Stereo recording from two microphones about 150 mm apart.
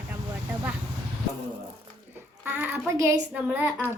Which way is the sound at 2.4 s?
10° right (ahead or behind).